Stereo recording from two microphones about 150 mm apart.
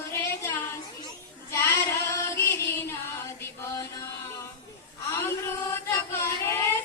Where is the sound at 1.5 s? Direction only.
20° left (ahead or behind).